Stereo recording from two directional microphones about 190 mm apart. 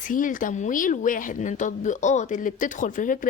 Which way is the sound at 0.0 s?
45° left (ahead or behind).